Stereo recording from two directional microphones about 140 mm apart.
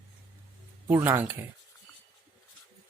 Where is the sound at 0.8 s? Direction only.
15° right (ahead or behind).